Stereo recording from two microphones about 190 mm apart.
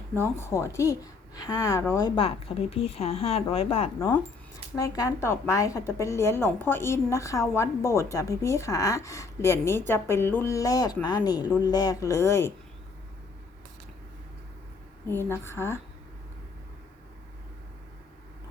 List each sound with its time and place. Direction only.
0.1 s a woman's voice: 10° left (ahead or behind); by 3.8 s 30° left (ahead or behind)
4.0 s a woman's voice: 15° left (ahead or behind)
15.0 s a woman's voice: 10° left (ahead or behind)